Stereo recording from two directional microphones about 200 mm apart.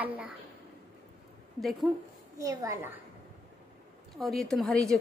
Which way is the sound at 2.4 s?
15° right (ahead or behind).